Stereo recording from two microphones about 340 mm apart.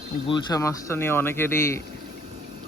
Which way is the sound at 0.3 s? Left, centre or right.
Centre.